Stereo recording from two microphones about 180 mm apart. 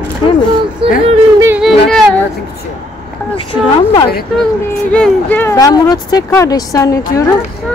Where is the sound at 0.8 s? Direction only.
30° right (ahead or behind).